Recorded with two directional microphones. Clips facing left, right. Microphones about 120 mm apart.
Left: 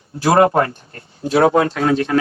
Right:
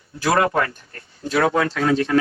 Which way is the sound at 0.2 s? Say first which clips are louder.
Left 6 dB; 30° left (ahead or behind).